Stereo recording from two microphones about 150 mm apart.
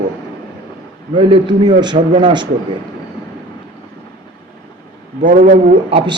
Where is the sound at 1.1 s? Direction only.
30° right (ahead or behind).